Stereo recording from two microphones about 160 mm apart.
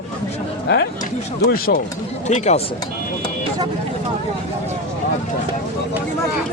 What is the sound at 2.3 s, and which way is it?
Speech, 45° left (ahead or behind).